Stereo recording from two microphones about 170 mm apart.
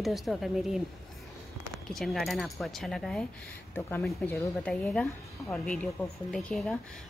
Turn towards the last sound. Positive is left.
turn(degrees=5)  # may be behind; listen again after turning